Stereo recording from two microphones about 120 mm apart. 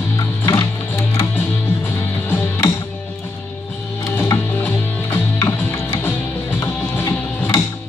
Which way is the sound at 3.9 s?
20° left (ahead or behind).